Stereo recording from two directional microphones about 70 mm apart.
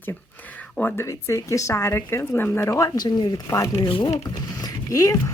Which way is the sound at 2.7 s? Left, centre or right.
Left.